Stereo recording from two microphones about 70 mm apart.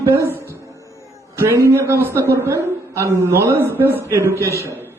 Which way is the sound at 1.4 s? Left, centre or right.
Right.